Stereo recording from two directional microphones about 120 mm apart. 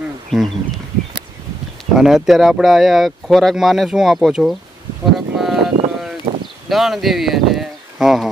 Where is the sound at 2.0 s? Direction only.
Centre (ahead or behind).